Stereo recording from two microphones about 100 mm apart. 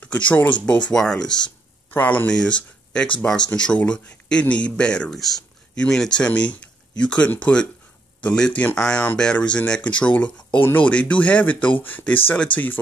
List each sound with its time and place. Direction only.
0.0 s speech: 15° left (ahead or behind)
0.9 s a sound: 5° left (ahead or behind)
2.0 s speech: 15° left (ahead or behind)